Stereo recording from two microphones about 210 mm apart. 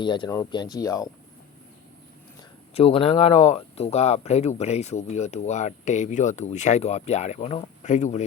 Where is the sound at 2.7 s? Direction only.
25° left (ahead or behind).